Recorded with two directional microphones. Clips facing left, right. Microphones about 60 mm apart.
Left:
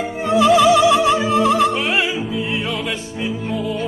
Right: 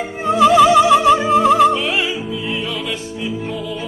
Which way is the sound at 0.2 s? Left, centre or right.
Right.